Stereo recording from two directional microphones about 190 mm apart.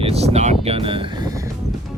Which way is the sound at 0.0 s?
35° right (ahead or behind).